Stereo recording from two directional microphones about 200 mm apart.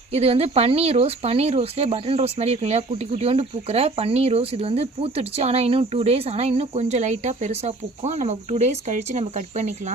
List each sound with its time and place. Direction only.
0.1 s speech: 30° right (ahead or behind)